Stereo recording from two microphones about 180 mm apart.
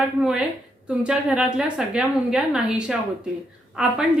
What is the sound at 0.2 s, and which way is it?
Speech, 5° right (ahead or behind).